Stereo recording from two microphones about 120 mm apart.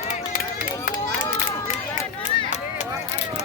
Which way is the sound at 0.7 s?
30° left (ahead or behind).